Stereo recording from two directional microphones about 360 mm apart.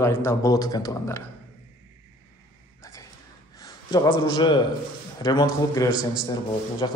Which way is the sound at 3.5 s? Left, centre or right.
Centre.